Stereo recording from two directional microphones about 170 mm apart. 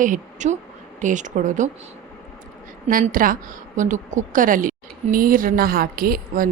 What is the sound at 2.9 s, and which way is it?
A woman's voice, 55° right (ahead or behind).